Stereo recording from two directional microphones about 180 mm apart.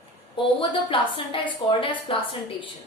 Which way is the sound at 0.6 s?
30° left (ahead or behind).